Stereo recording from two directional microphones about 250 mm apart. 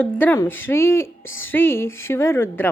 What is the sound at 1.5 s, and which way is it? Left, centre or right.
Speech, centre.